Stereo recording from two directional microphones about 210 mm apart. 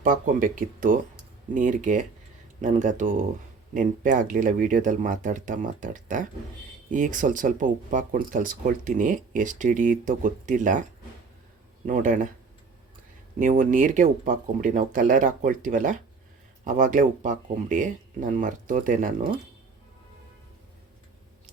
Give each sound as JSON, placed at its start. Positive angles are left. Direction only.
{"t": 0.0, "sound": "speech", "side_deg": -40}
{"t": 11.9, "sound": "speech", "side_deg": -35}
{"t": 13.4, "sound": "speech", "side_deg": -40}